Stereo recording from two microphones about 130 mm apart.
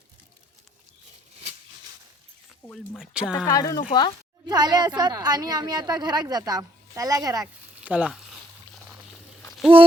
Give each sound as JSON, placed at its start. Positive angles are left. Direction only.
{"t": 2.6, "sound": "speech", "side_deg": 0}
{"t": 3.4, "sound": "speech", "side_deg": 25}
{"t": 4.4, "sound": "a woman's voice", "side_deg": -30}
{"t": 7.9, "sound": "a sound", "side_deg": -10}